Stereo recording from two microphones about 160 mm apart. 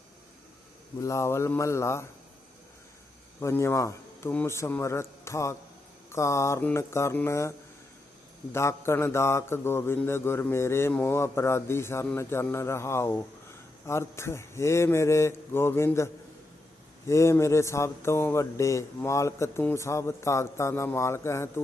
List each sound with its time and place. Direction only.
0.9 s mantra: 20° left (ahead or behind)
3.4 s mantra: 15° left (ahead or behind)
8.5 s mantra: 15° left (ahead or behind)
17.1 s mantra: 15° left (ahead or behind)